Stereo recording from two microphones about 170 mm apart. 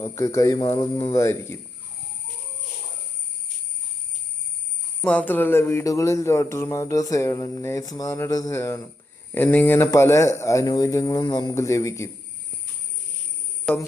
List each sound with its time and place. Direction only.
0.0 s speech: 20° left (ahead or behind)
5.0 s speech: 10° left (ahead or behind)